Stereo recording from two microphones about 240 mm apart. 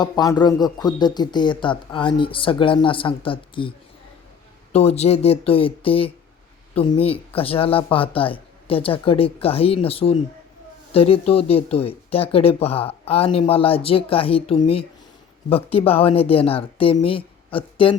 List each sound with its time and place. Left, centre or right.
0.0 s speech: centre
4.7 s speech: left